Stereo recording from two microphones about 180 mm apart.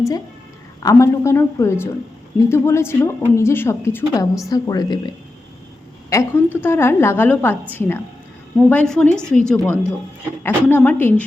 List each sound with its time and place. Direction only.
0.8 s a woman's voice: 15° left (ahead or behind)